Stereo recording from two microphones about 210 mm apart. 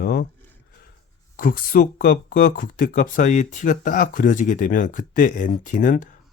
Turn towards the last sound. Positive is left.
turn(degrees=35)  # may be behind; listen again after turning